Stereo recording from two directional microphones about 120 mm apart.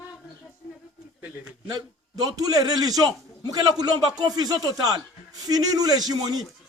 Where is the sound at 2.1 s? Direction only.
30° right (ahead or behind).